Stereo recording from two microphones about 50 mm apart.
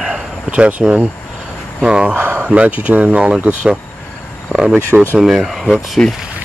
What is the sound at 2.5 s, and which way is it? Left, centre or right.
Speech, right.